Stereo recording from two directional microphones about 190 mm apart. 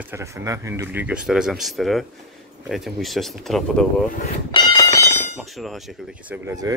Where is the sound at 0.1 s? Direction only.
15° right (ahead or behind); by 4.1 s 5° left (ahead or behind).